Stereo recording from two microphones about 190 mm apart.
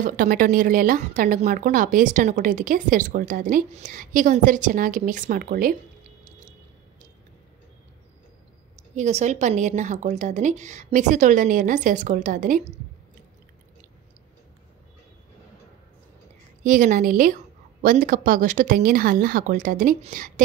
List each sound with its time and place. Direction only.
0.0 s speech: 45° right (ahead or behind)
8.9 s speech: 40° right (ahead or behind)
16.6 s speech: 45° right (ahead or behind)